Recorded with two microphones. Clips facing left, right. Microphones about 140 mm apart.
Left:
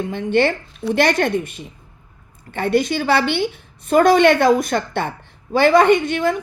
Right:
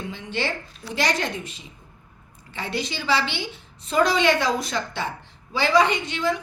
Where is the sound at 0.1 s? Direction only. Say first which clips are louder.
Left 12 dB; 55° left (ahead or behind).